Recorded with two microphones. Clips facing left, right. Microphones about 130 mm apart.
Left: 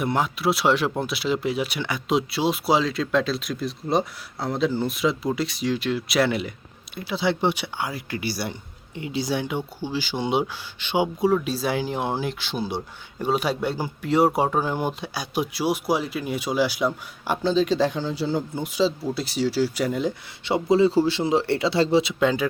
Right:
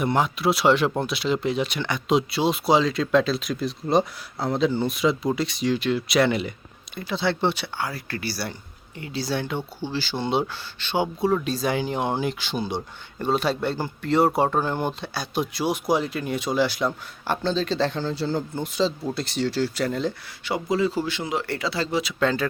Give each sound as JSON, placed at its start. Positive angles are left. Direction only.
{"t": 0.0, "sound": "speech", "side_deg": 0}
{"t": 20.4, "sound": "a man's voice", "side_deg": 25}
{"t": 22.2, "sound": "speech", "side_deg": 15}